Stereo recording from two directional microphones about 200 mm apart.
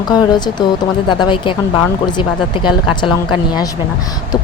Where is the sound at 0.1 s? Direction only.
20° left (ahead or behind).